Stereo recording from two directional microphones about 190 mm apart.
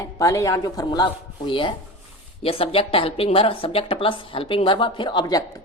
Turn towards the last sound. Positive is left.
turn(degrees=25)  # may be behind; listen again after turning